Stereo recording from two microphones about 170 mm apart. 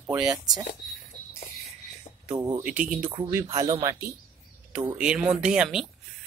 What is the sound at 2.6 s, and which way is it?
Speech, 10° right (ahead or behind).